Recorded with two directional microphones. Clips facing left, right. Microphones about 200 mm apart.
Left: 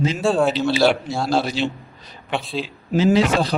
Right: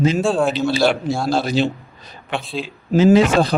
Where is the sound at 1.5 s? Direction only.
45° right (ahead or behind).